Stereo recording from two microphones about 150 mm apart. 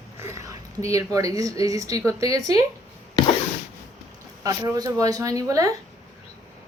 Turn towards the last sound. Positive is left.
turn(degrees=-20)  # may be behind; listen again after turning